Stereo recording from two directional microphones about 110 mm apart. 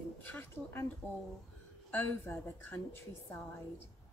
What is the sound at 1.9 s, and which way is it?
A woman's voice, 15° left (ahead or behind).